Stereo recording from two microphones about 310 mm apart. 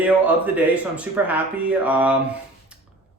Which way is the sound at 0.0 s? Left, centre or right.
Centre.